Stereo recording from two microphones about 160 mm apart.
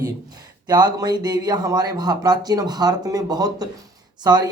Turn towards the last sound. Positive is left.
turn(degrees=-25)  # may be behind; listen again after turning